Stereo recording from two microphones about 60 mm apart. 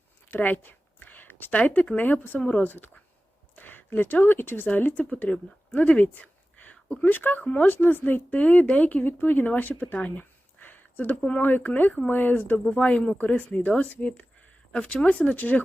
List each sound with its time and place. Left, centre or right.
0.3 s a woman's voice: left
12.6 s speech: left